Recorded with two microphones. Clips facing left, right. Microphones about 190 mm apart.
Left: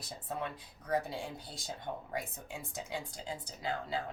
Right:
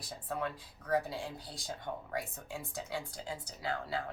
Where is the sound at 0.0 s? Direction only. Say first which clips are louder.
Right 2 dB; 25° left (ahead or behind).